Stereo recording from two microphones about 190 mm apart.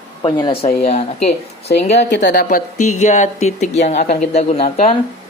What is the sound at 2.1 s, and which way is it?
Speech, 65° left (ahead or behind).